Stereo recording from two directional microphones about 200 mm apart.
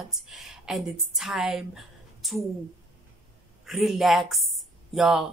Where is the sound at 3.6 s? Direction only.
Centre (ahead or behind).